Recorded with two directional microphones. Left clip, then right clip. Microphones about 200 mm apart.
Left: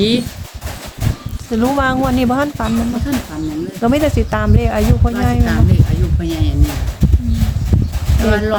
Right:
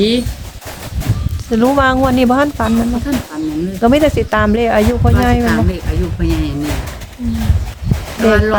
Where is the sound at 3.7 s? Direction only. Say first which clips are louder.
Right 4 dB; 15° right (ahead or behind).